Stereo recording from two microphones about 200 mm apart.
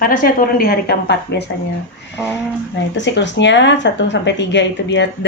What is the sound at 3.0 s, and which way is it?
Speech, 60° left (ahead or behind).